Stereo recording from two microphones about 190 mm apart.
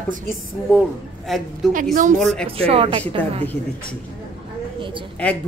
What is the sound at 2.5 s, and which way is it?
Speech, 30° right (ahead or behind).